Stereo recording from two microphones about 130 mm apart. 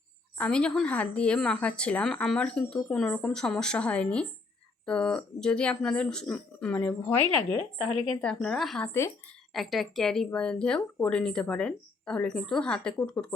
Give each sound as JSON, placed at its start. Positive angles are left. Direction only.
{"t": 0.3, "sound": "speech", "side_deg": 10}
{"t": 8.2, "sound": "a woman's voice", "side_deg": 5}
{"t": 8.9, "sound": "speech", "side_deg": 20}
{"t": 9.5, "sound": "speech", "side_deg": 0}